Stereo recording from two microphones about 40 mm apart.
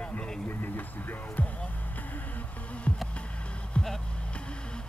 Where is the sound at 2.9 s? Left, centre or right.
Left.